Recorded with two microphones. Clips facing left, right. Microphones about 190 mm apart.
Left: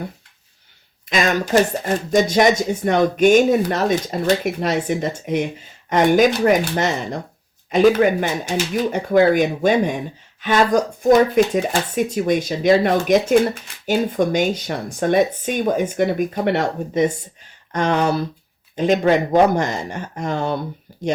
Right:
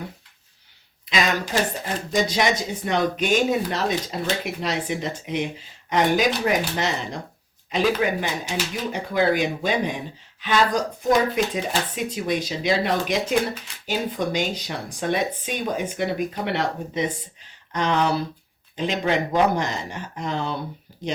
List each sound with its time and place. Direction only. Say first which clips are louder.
1.1 s speech: left 6 dB; 50° left (ahead or behind)